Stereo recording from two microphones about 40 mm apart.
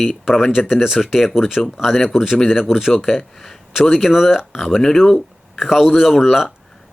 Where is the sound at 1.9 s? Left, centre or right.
Centre.